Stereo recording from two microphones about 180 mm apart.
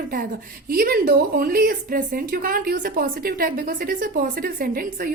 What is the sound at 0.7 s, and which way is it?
A woman's voice, 55° right (ahead or behind).